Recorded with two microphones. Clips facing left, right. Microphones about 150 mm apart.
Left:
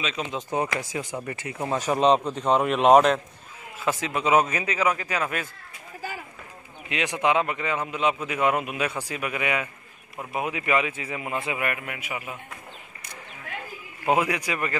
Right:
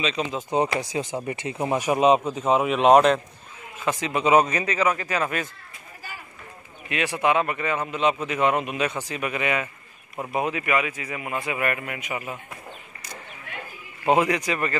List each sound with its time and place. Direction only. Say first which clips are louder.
0.0 s a man's voice: right 3 dB; centre (ahead or behind)
0.5 s a man's voice: right 4 dB; 20° right (ahead or behind); by 5.5 s 5° left (ahead or behind)
6.9 s a man's voice: right 1 dB; 20° left (ahead or behind)
10.5 s speech: even; 30° left (ahead or behind)
11.5 s a man's voice: right 3 dB; 5° left (ahead or behind)
14.1 s a man's voice: right 3 dB; 10° left (ahead or behind)